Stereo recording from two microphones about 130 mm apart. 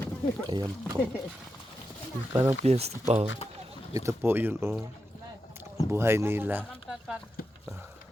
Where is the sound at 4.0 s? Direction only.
20° right (ahead or behind).